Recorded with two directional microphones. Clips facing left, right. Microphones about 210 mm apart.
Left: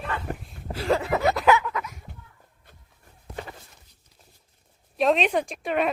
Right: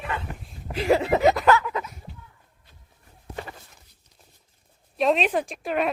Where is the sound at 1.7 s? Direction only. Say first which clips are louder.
Right 2 dB; 25° right (ahead or behind).